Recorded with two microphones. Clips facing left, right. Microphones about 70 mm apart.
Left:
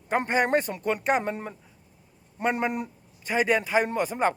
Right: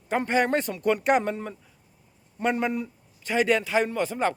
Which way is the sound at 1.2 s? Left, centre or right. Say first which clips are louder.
Right 1 dB; centre.